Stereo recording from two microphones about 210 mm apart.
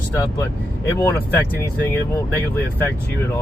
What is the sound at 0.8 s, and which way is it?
Speech, 15° left (ahead or behind).